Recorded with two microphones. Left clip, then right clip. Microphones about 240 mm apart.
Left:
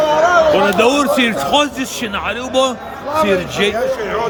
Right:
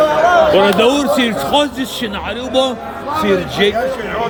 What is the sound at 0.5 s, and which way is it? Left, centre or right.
Speech, centre.